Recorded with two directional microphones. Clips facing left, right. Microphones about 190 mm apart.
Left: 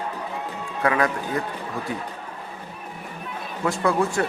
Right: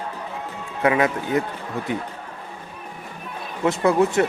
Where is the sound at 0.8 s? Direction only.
20° right (ahead or behind).